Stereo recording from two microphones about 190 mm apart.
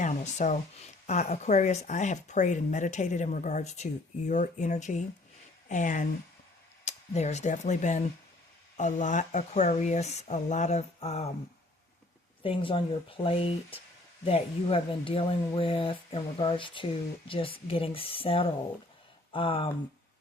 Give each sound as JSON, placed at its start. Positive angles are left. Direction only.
{"t": 0.0, "sound": "speech", "side_deg": 40}
{"t": 12.4, "sound": "speech", "side_deg": 25}